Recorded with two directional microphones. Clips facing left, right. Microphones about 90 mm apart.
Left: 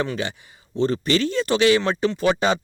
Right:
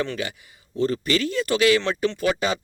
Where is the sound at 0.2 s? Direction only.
30° left (ahead or behind).